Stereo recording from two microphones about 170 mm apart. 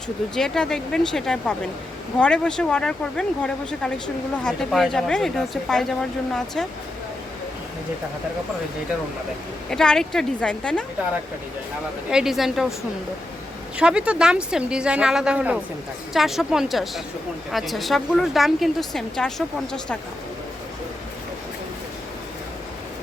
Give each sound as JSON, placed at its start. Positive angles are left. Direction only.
{"t": 0.3, "sound": "speech", "side_deg": 5}
{"t": 9.6, "sound": "speech", "side_deg": 5}
{"t": 12.1, "sound": "speech", "side_deg": 0}
{"t": 13.7, "sound": "speech", "side_deg": -5}